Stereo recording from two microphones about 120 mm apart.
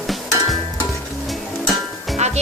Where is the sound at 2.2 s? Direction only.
70° right (ahead or behind).